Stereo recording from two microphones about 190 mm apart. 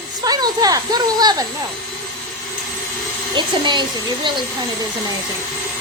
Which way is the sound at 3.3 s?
25° right (ahead or behind).